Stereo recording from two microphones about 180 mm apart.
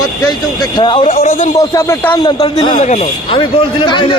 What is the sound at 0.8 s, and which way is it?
A man's voice, 25° left (ahead or behind).